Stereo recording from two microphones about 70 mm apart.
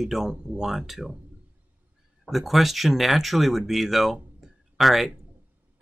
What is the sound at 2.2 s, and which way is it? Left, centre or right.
Speech, centre.